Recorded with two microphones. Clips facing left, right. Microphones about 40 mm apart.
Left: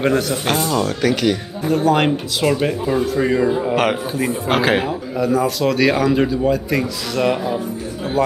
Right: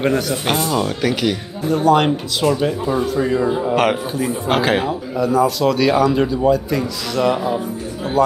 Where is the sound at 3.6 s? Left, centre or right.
Centre.